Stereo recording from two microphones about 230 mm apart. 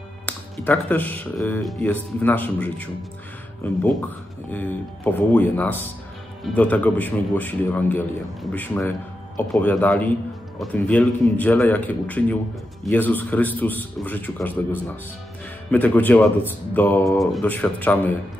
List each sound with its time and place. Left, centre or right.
0.3 s speech: centre